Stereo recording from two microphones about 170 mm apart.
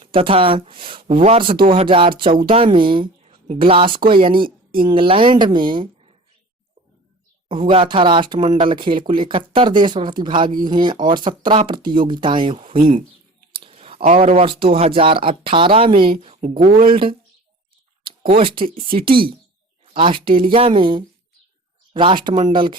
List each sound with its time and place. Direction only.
0.1 s speech: 35° right (ahead or behind)
7.4 s speech: 30° right (ahead or behind)